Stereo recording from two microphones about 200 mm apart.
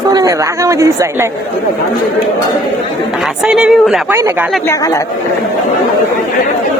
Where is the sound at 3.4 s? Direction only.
5° right (ahead or behind).